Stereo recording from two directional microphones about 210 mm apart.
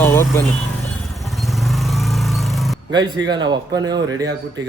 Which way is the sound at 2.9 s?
20° right (ahead or behind).